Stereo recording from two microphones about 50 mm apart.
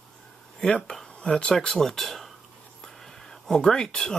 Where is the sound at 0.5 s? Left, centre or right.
Centre.